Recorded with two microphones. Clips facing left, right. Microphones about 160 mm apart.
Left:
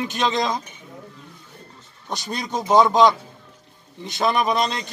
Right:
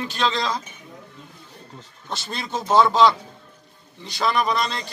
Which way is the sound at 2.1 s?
15° left (ahead or behind).